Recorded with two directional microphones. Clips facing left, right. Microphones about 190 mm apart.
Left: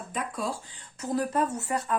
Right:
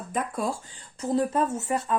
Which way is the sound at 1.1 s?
25° right (ahead or behind).